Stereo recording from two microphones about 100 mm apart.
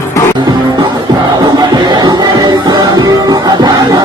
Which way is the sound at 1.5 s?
40° right (ahead or behind).